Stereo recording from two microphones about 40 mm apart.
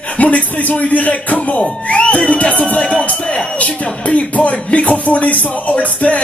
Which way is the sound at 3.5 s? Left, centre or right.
Left.